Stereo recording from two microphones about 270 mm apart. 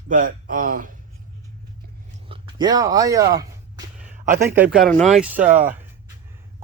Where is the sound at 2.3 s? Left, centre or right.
Centre.